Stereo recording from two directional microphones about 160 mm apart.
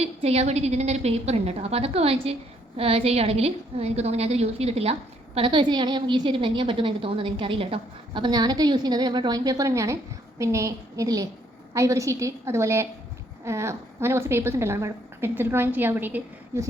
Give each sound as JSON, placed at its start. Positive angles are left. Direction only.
{"t": 0.0, "sound": "a woman's voice", "side_deg": -40}